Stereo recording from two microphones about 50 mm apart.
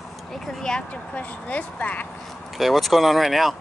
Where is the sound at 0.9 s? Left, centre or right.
Left.